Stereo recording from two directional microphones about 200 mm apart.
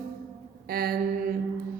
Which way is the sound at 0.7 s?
50° right (ahead or behind).